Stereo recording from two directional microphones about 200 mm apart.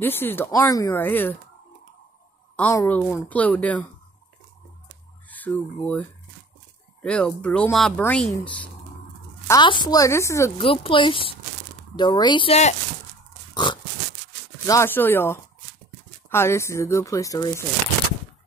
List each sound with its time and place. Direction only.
0.0 s speech: 10° left (ahead or behind)
2.5 s speech: 10° left (ahead or behind)
5.3 s speech: 10° left (ahead or behind)
9.5 s speech: 20° left (ahead or behind)
10.6 s speech: 25° left (ahead or behind)
14.7 s speech: 10° left (ahead or behind)